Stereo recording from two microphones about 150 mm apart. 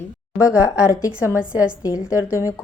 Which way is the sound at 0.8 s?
20° left (ahead or behind).